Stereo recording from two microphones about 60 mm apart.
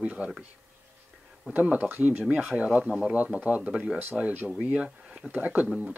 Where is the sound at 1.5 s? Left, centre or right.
Right.